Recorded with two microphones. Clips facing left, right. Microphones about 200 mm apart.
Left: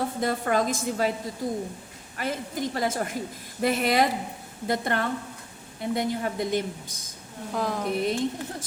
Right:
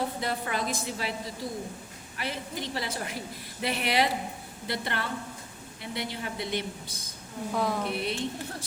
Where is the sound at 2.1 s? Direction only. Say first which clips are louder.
Left 5 dB; 45° left (ahead or behind).